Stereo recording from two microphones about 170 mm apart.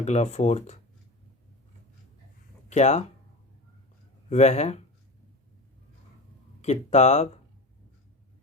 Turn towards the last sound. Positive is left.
turn(degrees=40)  # may be behind; listen again after turning